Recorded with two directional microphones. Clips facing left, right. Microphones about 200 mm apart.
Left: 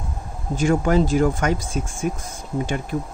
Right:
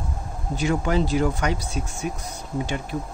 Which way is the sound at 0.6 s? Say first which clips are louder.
Left 4 dB; 45° left (ahead or behind).